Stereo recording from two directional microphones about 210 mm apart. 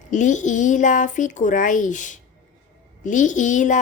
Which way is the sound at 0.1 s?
35° left (ahead or behind).